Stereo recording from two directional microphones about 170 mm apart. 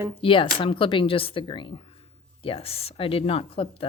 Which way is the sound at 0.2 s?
30° left (ahead or behind).